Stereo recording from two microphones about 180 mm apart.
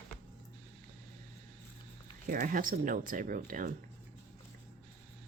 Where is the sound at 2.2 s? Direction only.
50° right (ahead or behind).